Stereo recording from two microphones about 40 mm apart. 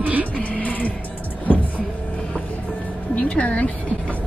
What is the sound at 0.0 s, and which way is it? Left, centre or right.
Music, right.